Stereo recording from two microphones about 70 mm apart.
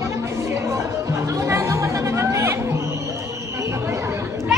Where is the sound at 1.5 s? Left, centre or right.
Right.